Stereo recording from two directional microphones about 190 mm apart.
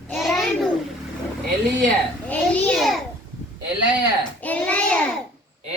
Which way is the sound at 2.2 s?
5° left (ahead or behind).